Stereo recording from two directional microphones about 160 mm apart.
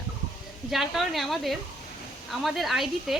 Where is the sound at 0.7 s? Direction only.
Centre (ahead or behind).